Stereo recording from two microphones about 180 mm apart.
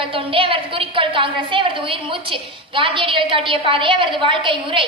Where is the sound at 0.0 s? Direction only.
30° right (ahead or behind).